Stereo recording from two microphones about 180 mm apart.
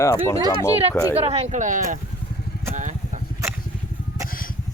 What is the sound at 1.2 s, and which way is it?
Speech, 35° right (ahead or behind).